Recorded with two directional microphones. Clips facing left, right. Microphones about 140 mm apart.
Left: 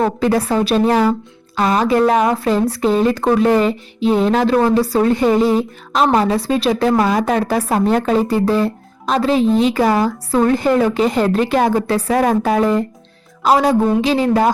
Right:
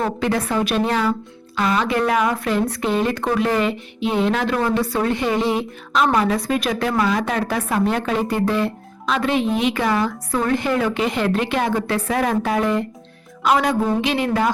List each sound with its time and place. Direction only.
0.2 s a woman's voice: 35° left (ahead or behind)